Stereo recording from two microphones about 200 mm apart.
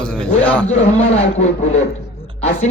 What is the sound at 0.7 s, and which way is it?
Speech, 35° left (ahead or behind).